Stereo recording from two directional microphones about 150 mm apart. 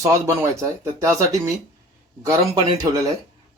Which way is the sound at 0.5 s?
20° right (ahead or behind).